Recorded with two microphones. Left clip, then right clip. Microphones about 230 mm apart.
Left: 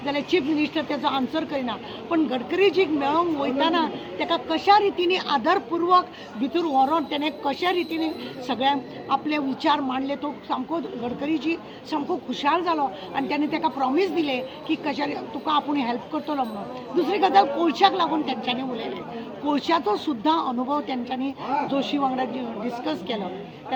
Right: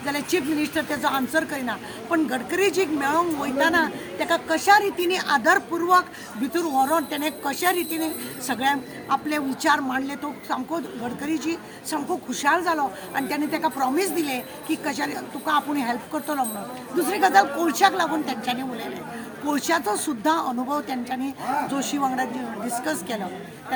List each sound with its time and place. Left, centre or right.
0.0 s speech: right